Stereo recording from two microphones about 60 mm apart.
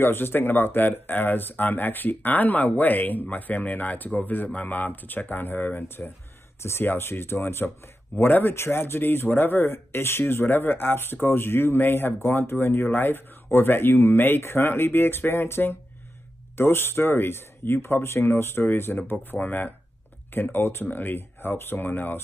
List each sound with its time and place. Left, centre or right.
0.0 s speech: left
19.1 s speech: left
20.3 s speech: left
20.8 s speech: left